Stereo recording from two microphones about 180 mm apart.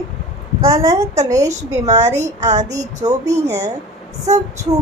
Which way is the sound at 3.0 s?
20° right (ahead or behind).